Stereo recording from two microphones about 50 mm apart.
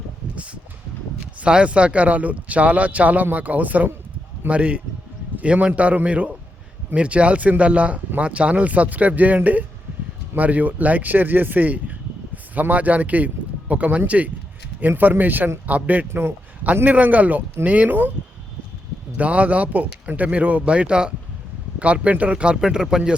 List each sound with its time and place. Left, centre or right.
0.3 s a sound: right
1.4 s a man's voice: right
19.1 s speech: right
22.6 s speech: centre